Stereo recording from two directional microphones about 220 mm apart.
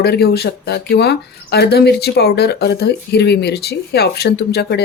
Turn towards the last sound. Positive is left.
turn(degrees=50)  # may be behind; listen again after turning